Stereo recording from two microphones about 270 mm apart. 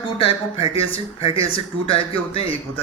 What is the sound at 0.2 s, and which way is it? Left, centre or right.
A man's voice, centre.